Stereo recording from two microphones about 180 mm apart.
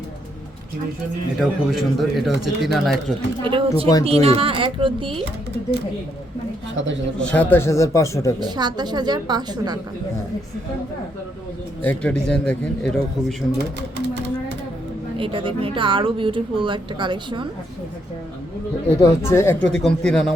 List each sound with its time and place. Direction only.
1.4 s speech: centre (ahead or behind)
3.4 s speech: 25° right (ahead or behind)
6.7 s speech: 90° right
7.2 s a man's voice: 5° left (ahead or behind)
8.4 s speech: 25° right (ahead or behind)
11.8 s a man's voice: 10° left (ahead or behind)
15.2 s speech: 30° right (ahead or behind)
19.0 s a man's voice: 15° left (ahead or behind)